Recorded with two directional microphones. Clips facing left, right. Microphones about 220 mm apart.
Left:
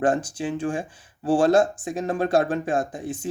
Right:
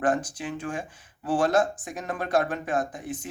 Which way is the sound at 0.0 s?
30° left (ahead or behind).